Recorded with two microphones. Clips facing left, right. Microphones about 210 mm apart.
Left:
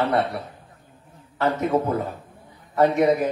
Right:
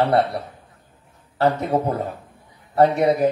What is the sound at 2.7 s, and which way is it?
Speech, 35° right (ahead or behind).